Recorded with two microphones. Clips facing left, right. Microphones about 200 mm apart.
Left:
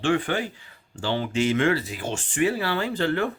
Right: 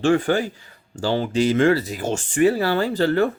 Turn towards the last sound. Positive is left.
turn(degrees=-40)  # may be behind; listen again after turning